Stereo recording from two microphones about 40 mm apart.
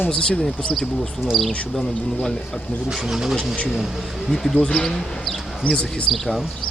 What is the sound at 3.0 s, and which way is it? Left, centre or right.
Speech, centre.